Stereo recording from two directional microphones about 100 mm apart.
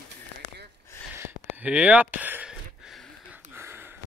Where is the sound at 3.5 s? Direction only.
25° right (ahead or behind).